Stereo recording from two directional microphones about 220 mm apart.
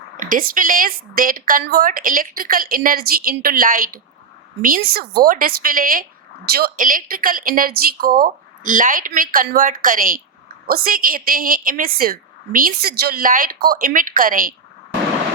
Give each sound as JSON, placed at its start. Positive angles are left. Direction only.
{"t": 0.2, "sound": "a woman's voice", "side_deg": -40}